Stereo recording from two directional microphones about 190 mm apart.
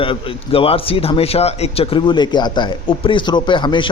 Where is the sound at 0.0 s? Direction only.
30° left (ahead or behind).